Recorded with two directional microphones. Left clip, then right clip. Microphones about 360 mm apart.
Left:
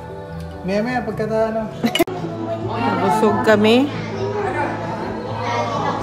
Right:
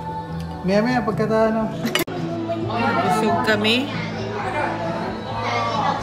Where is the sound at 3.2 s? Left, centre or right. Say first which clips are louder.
Left 4 dB; left.